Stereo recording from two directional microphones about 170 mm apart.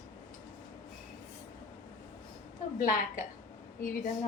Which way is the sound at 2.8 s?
55° left (ahead or behind).